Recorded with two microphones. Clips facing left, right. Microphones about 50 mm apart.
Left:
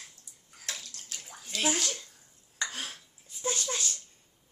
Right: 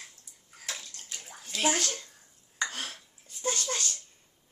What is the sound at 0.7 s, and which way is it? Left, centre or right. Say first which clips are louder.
Bathtub: even; centre.